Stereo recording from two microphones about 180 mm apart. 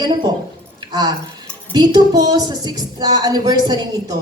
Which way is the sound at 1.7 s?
25° right (ahead or behind).